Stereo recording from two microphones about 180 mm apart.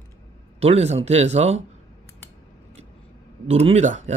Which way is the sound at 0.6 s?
35° right (ahead or behind).